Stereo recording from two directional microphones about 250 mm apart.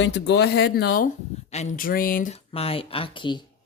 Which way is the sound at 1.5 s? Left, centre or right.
Left.